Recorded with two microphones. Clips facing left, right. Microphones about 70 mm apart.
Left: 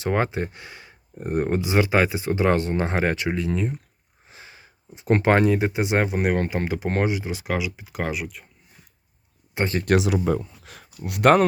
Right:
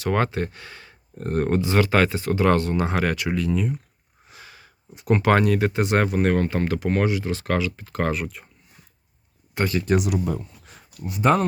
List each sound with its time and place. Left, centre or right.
0.0 s speech: centre
4.3 s a sound: left
5.2 s speech: left; by 8.4 s centre
9.6 s speech: left
9.8 s speech: left